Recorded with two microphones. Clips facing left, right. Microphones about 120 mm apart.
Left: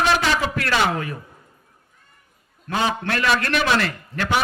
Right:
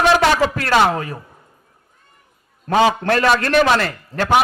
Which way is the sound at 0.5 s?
40° right (ahead or behind).